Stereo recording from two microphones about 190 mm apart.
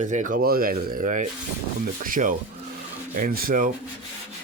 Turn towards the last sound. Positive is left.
turn(degrees=-45)  # may be behind; listen again after turning